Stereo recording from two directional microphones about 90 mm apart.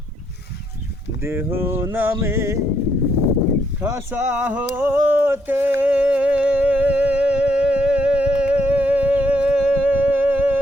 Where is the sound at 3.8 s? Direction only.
15° right (ahead or behind).